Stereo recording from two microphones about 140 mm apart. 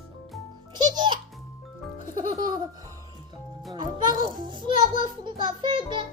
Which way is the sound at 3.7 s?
30° right (ahead or behind).